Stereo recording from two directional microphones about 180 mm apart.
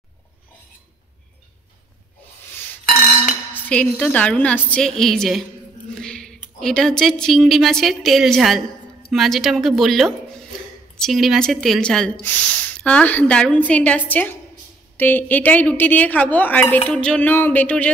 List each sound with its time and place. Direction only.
2.8 s dishes: 50° left (ahead or behind)
3.5 s speech: 5° left (ahead or behind)